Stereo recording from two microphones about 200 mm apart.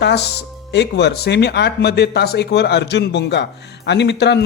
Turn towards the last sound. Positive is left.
turn(degrees=60)  # may be behind; listen again after turning